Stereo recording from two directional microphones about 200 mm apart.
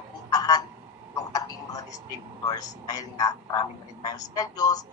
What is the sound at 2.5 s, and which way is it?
Speech, 20° left (ahead or behind).